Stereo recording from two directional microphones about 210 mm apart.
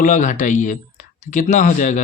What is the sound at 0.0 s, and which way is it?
Speech, 35° left (ahead or behind).